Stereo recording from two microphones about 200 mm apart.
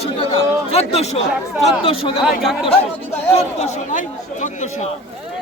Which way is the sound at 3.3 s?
35° left (ahead or behind).